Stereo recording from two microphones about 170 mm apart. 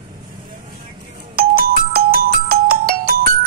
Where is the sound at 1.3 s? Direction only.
60° right (ahead or behind).